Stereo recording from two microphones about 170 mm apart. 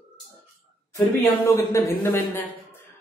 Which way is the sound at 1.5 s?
15° left (ahead or behind).